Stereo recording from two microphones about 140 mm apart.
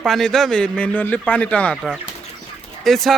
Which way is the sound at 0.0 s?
5° left (ahead or behind).